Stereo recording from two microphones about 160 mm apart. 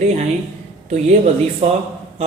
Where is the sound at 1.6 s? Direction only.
40° right (ahead or behind).